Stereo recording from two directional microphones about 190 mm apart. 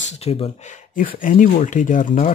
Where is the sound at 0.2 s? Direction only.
35° left (ahead or behind).